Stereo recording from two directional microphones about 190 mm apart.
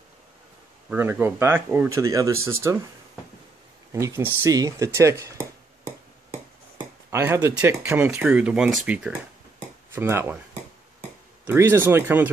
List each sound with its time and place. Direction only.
0.8 s speech: 10° right (ahead or behind)
3.9 s speech: 15° right (ahead or behind)
7.1 s speech: 15° right (ahead or behind)
11.4 s speech: 10° right (ahead or behind)